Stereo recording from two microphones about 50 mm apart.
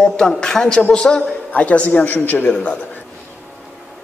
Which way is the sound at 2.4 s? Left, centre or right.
Left.